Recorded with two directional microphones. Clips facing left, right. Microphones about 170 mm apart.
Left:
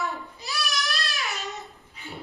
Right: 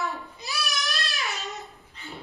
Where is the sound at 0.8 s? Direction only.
20° right (ahead or behind).